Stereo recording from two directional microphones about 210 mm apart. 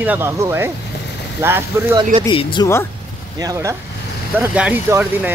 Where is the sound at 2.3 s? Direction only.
25° left (ahead or behind).